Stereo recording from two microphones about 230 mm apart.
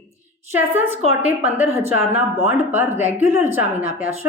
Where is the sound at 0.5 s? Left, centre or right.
Centre.